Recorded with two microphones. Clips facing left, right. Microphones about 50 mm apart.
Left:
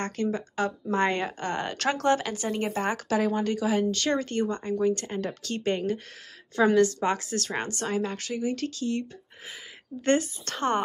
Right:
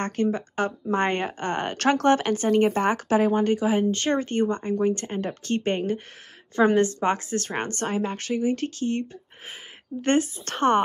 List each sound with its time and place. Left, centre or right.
0.0 s speech: right
10.0 s speech: right